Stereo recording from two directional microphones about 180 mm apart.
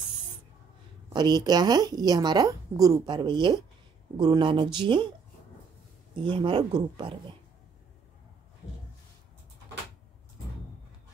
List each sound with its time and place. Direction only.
1.1 s a woman's voice: 25° right (ahead or behind)
6.1 s a woman's voice: 30° right (ahead or behind)